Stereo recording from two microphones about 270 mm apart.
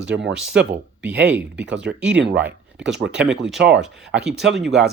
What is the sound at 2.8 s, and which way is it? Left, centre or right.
Speech, right.